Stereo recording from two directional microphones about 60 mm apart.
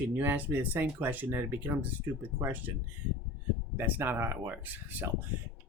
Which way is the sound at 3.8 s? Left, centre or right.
Right.